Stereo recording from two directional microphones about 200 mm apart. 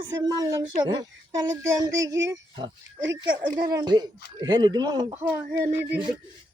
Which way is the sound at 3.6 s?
15° right (ahead or behind).